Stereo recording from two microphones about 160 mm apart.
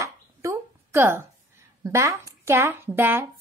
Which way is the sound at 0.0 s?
15° right (ahead or behind).